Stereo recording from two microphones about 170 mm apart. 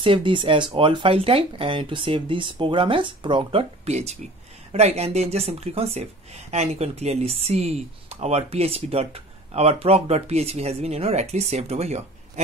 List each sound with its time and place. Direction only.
0.0 s speech: 30° right (ahead or behind)